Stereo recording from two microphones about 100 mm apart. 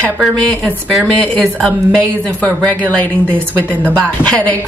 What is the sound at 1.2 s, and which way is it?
Speech, 5° left (ahead or behind).